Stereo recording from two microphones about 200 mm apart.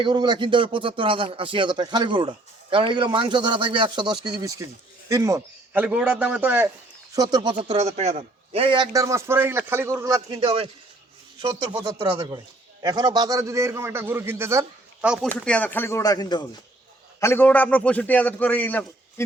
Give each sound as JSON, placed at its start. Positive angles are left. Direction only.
{"t": 0.0, "sound": "a man's voice", "side_deg": -20}
{"t": 7.6, "sound": "speech", "side_deg": -30}
{"t": 11.7, "sound": "a man's voice", "side_deg": -20}